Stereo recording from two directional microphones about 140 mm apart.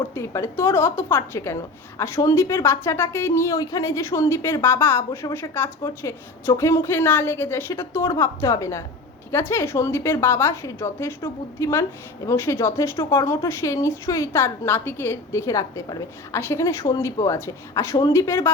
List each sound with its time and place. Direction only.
0.1 s a woman's voice: 20° left (ahead or behind)